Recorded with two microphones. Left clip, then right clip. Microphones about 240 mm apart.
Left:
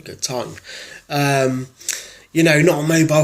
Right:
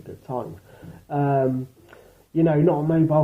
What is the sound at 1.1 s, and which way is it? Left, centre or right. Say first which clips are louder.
A man's voice: left 4 dB; left.